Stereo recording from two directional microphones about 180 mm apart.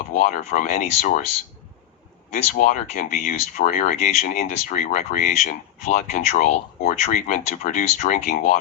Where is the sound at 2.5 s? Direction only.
45° left (ahead or behind).